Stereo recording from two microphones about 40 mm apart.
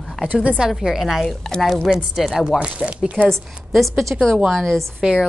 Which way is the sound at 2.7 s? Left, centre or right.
Right.